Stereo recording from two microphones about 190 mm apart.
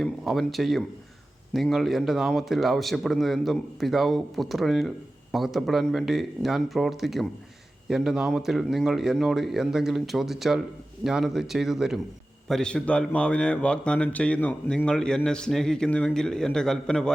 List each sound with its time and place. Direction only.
0.0 s a man's voice: centre (ahead or behind)